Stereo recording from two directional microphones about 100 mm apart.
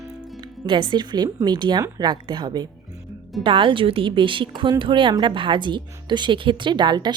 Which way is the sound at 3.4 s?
60° right (ahead or behind).